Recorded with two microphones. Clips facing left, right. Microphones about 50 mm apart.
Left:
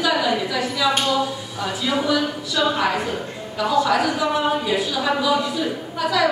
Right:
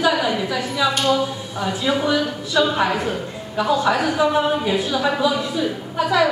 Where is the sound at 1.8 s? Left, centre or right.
Right.